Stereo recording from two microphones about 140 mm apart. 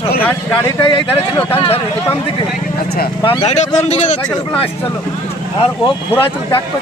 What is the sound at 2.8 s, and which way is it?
Speech, 90° left.